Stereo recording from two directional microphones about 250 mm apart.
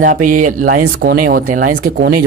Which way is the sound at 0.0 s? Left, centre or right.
Right.